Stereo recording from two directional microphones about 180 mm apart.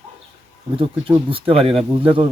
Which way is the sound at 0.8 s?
30° right (ahead or behind).